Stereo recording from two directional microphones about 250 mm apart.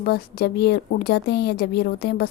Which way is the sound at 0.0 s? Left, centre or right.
Left.